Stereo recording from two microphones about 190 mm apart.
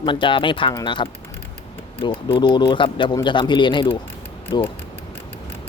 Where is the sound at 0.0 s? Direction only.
25° left (ahead or behind).